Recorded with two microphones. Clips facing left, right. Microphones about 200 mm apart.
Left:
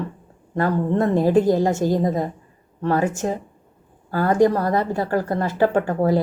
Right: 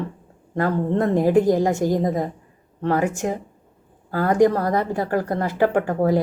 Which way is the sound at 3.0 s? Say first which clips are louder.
Even; 20° left (ahead or behind).